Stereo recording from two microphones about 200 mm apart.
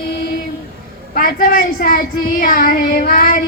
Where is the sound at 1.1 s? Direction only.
45° left (ahead or behind).